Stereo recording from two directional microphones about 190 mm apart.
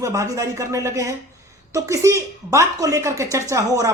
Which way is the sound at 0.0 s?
15° right (ahead or behind).